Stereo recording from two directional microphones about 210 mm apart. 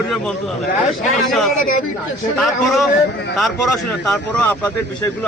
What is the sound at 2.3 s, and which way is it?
Speech, centre (ahead or behind).